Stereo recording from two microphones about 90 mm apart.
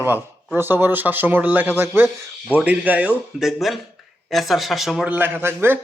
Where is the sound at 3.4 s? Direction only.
Centre (ahead or behind).